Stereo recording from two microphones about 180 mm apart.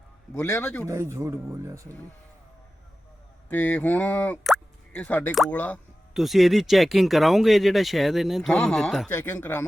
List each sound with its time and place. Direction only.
0.4 s speech: 10° left (ahead or behind)
0.9 s speech: 15° right (ahead or behind)
3.5 s speech: 10° left (ahead or behind)